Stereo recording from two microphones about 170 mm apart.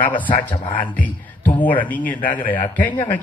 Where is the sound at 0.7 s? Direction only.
10° left (ahead or behind).